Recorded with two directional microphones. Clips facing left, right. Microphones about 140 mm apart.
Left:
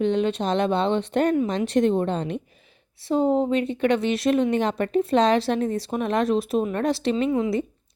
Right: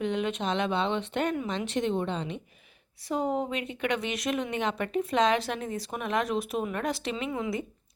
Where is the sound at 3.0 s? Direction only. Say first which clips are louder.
Left 8 dB; 30° left (ahead or behind).